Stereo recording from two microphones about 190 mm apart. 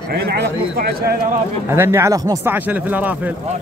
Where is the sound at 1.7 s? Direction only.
15° right (ahead or behind).